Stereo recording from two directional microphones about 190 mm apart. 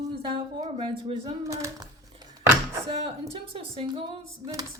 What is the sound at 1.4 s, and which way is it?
Speech, 15° right (ahead or behind).